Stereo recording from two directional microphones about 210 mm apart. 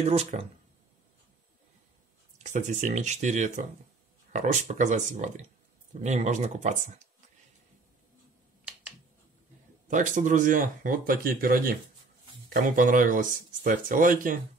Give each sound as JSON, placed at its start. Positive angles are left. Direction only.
{"t": 0.0, "sound": "speech", "side_deg": -30}
{"t": 2.3, "sound": "speech", "side_deg": -35}
{"t": 9.8, "sound": "speech", "side_deg": -35}